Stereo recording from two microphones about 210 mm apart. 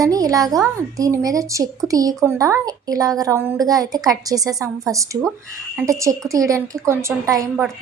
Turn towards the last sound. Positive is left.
turn(degrees=-15)  # may be behind; listen again after turning